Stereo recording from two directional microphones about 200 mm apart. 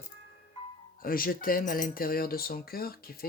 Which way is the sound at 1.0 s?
45° left (ahead or behind).